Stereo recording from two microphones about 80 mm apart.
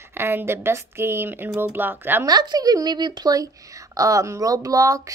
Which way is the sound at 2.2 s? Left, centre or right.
Right.